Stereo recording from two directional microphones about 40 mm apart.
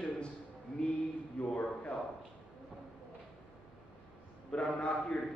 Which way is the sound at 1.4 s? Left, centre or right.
Left.